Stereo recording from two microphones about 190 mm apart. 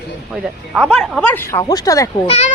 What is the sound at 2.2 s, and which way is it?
Speech, 35° left (ahead or behind).